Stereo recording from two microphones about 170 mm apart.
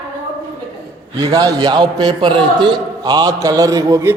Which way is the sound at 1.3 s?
20° right (ahead or behind).